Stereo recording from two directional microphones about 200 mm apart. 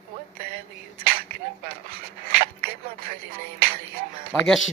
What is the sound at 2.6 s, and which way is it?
Speech, 45° right (ahead or behind).